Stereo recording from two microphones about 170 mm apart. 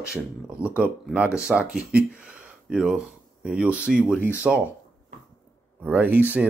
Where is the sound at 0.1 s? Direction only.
5° right (ahead or behind).